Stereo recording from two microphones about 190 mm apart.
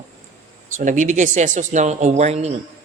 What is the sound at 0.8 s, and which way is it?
A man's voice, 40° right (ahead or behind).